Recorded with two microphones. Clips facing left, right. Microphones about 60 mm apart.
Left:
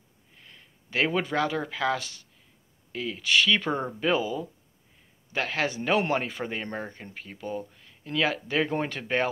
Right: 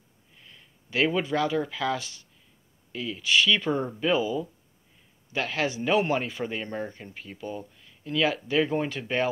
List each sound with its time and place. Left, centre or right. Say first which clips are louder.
0.5 s speech: even; left